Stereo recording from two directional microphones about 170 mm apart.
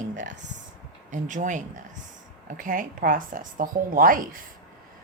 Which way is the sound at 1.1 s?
45° right (ahead or behind).